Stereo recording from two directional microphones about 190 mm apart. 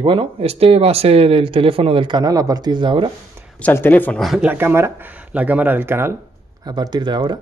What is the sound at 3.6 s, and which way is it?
Speech, 10° left (ahead or behind).